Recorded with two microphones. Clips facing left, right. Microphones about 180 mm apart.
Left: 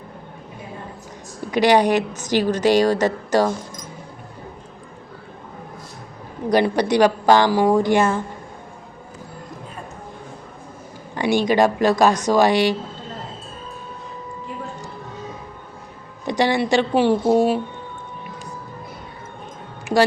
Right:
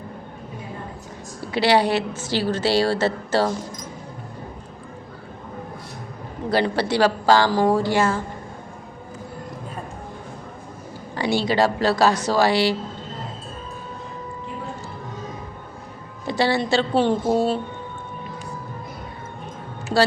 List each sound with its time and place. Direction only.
1.5 s speech: 15° left (ahead or behind)
6.5 s a woman's voice: 15° left (ahead or behind)
11.1 s speech: 15° left (ahead or behind)
16.2 s speech: 15° left (ahead or behind)